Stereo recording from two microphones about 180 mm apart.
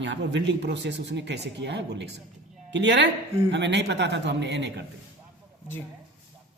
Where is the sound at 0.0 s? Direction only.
80° right.